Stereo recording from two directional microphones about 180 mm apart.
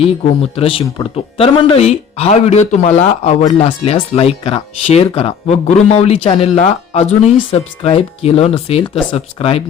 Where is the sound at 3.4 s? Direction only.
30° left (ahead or behind).